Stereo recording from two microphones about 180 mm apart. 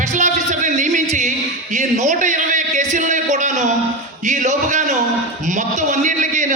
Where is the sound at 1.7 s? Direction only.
40° right (ahead or behind).